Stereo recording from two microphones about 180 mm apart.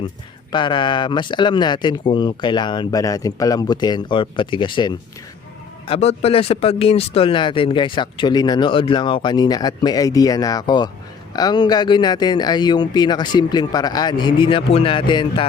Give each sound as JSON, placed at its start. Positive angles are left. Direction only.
{"t": 0.5, "sound": "speech", "side_deg": 25}
{"t": 5.9, "sound": "speech", "side_deg": 35}